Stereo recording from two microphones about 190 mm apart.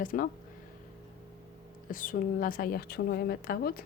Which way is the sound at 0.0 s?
45° left (ahead or behind).